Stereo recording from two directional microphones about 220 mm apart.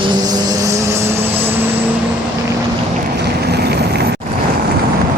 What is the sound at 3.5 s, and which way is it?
Vehicle, 45° right (ahead or behind).